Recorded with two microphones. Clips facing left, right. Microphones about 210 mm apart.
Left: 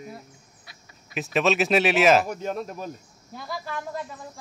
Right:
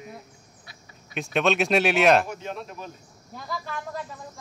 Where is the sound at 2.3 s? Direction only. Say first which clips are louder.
Left 5 dB; 45° left (ahead or behind).